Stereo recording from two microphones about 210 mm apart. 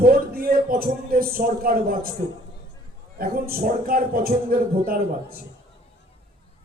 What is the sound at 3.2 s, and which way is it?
Speech, 45° right (ahead or behind).